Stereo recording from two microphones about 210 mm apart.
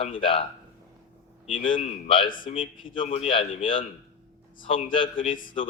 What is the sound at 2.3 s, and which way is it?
Speech, 40° left (ahead or behind).